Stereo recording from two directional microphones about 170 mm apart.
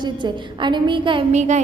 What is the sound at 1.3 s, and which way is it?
Speech, 45° right (ahead or behind).